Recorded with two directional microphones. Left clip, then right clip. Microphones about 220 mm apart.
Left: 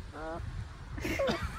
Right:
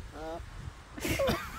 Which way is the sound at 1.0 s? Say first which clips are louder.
Right 2 dB; 10° right (ahead or behind).